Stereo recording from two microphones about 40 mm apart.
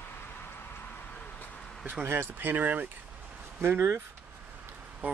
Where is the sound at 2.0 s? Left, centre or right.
Right.